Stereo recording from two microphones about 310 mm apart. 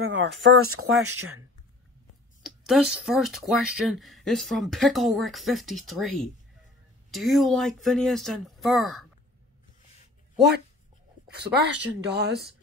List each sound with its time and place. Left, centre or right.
0.0 s speech: right
2.4 s speech: centre
11.2 s speech: right